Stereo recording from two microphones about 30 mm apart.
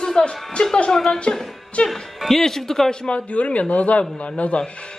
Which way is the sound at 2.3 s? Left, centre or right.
Centre.